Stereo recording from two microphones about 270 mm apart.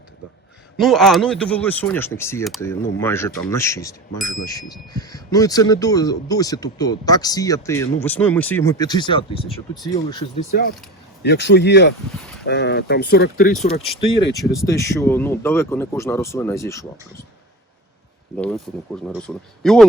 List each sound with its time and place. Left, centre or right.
0.8 s a man's voice: centre
11.2 s speech: left
14.3 s a man's voice: centre
18.3 s speech: centre